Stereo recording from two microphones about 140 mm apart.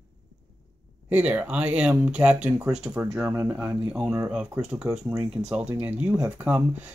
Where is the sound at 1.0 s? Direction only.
10° right (ahead or behind).